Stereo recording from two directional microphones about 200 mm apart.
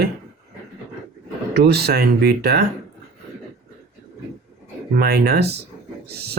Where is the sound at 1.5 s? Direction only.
55° right (ahead or behind).